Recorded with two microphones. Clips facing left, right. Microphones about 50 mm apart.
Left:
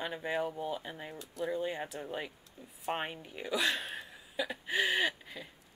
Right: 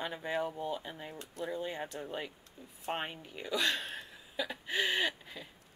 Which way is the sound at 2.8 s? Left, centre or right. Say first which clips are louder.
Left 1 dB; centre.